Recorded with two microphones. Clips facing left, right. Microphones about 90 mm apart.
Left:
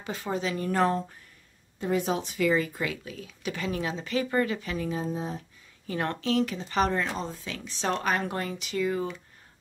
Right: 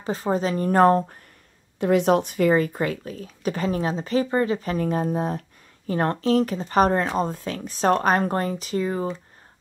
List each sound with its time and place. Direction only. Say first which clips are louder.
0.0 s speech: right 7 dB; 35° right (ahead or behind)
1.8 s speech: right 9 dB; 70° right (ahead or behind); by 4.6 s 30° right (ahead or behind)
4.6 s speech: right 7 dB; 45° right (ahead or behind); by 5.4 s 60° right (ahead or behind)
5.9 s speech: right 7 dB; 40° right (ahead or behind)